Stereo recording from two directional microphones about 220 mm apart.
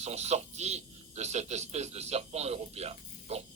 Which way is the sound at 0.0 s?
30° right (ahead or behind).